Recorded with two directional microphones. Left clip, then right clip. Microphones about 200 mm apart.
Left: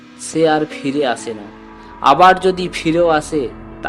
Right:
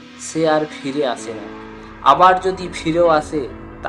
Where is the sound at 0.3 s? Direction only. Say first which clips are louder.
Left 2 dB; 35° left (ahead or behind).